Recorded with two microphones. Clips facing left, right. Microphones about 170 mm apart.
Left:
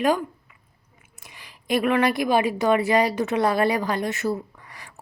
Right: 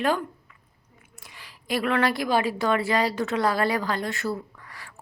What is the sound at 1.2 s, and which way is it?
A woman's voice, 20° left (ahead or behind).